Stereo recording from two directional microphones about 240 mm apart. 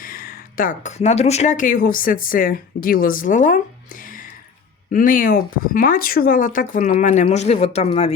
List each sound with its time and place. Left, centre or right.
0.0 s speech: left
4.0 s music: left
4.9 s speech: left